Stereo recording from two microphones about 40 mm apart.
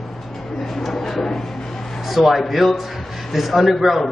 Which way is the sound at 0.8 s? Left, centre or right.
Centre.